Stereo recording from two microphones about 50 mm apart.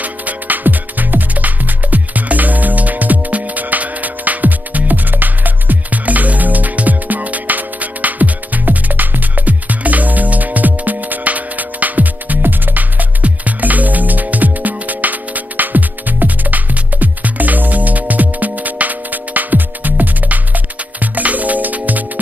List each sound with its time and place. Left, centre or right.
0.0 s music: right